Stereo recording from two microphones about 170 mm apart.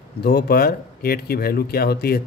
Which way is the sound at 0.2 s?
70° left (ahead or behind).